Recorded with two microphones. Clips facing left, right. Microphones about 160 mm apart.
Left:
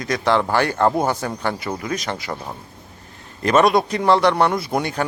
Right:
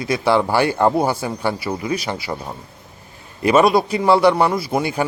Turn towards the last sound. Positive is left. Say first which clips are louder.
# right 2 dB
turn(degrees=-10)  # may be behind; listen again after turning